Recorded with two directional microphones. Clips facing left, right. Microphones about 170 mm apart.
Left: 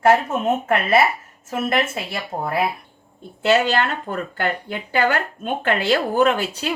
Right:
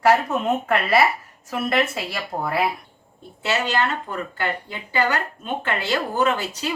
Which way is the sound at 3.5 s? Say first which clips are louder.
Left 5 dB; 55° left (ahead or behind).